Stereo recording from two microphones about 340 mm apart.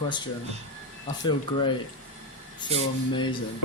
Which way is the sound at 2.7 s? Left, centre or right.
Centre.